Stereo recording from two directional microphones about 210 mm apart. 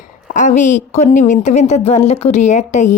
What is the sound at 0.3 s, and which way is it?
A woman's voice, 35° left (ahead or behind).